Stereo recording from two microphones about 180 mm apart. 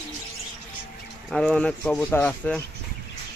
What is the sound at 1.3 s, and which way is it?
Speech, 5° left (ahead or behind).